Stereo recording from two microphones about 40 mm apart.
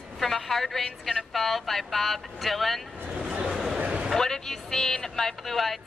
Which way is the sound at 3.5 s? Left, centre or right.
Centre.